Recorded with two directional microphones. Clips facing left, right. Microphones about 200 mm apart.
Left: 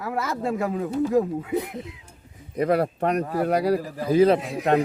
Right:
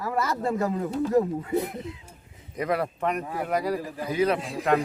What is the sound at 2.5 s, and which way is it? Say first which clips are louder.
A man's voice: left 5 dB; 35° left (ahead or behind).